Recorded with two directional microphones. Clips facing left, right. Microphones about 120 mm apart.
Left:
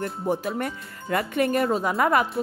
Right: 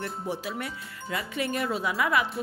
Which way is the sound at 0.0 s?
50° left (ahead or behind).